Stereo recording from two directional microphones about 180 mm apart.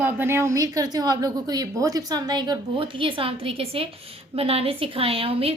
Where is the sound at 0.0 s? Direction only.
10° right (ahead or behind).